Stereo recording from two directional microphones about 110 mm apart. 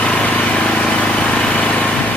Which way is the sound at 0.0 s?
10° left (ahead or behind).